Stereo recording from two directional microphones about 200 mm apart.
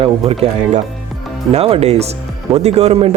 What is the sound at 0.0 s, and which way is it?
Speech, 30° right (ahead or behind).